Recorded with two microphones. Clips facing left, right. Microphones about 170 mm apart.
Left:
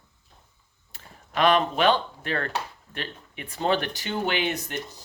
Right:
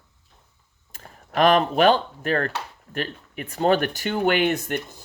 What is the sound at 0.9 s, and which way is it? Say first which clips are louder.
Speech: right 4 dB; 45° right (ahead or behind).